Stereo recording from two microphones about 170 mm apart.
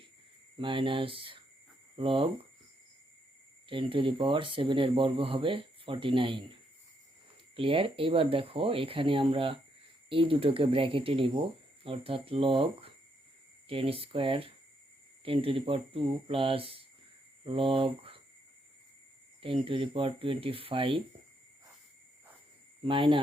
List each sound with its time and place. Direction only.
0.6 s speech: 30° right (ahead or behind)
3.7 s speech: 30° right (ahead or behind)
7.5 s speech: 30° right (ahead or behind)
19.4 s speech: 30° right (ahead or behind)
22.8 s speech: 30° right (ahead or behind)